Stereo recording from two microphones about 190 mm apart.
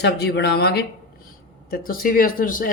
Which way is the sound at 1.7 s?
45° left (ahead or behind).